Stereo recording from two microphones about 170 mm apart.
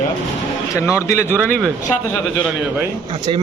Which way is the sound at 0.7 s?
20° left (ahead or behind).